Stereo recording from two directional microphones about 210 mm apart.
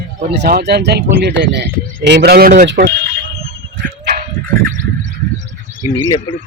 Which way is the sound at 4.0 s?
50° right (ahead or behind).